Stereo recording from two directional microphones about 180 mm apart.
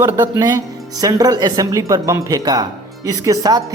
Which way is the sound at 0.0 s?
15° right (ahead or behind).